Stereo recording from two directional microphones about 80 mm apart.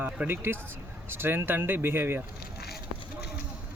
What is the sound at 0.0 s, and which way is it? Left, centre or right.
Speech, right.